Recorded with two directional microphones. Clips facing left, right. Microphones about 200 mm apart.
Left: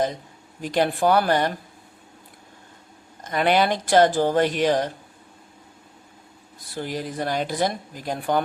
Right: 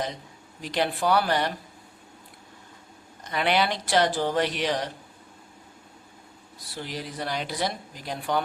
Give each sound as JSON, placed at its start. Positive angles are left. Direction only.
{"t": 0.6, "sound": "speech", "side_deg": 45}
{"t": 3.2, "sound": "speech", "side_deg": 45}
{"t": 6.7, "sound": "speech", "side_deg": 50}